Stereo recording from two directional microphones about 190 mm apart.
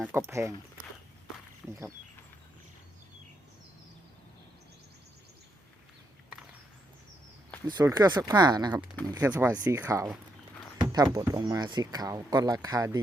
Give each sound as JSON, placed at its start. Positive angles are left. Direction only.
{"t": 0.0, "sound": "speech", "side_deg": -10}
{"t": 1.6, "sound": "speech", "side_deg": 0}
{"t": 7.7, "sound": "speech", "side_deg": -20}
{"t": 9.2, "sound": "speech", "side_deg": -10}